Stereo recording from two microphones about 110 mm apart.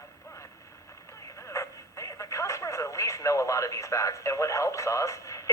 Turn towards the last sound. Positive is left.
turn(degrees=30)  # may be behind; listen again after turning